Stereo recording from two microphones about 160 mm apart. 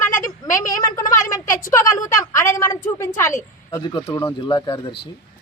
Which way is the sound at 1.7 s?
20° left (ahead or behind).